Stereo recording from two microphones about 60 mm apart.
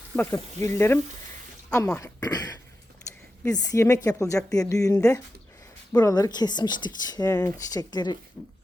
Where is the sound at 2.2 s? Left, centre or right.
Left.